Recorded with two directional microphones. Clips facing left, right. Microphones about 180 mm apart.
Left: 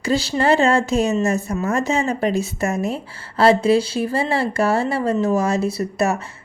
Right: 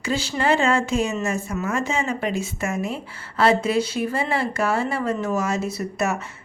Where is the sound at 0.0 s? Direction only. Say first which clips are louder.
Left 4 dB; 35° left (ahead or behind).